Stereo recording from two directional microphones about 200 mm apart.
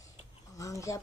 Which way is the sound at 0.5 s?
15° left (ahead or behind).